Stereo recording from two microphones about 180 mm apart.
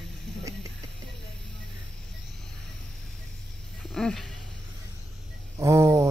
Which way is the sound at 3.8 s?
5° left (ahead or behind).